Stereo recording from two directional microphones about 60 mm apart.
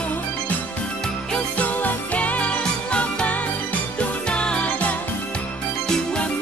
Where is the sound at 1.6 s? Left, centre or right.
Left.